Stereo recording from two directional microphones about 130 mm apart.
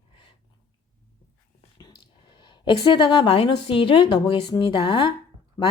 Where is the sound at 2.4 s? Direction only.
40° left (ahead or behind).